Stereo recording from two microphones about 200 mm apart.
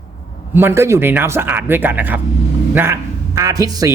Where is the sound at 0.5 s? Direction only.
10° right (ahead or behind).